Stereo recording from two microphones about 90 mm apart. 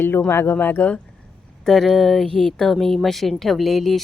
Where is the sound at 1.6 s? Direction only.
5° left (ahead or behind).